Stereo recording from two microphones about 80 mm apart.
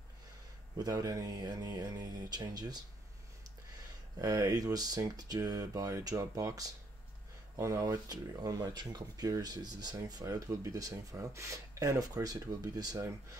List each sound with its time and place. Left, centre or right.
0.7 s speech: right
4.2 s speech: right
10.5 s speech: right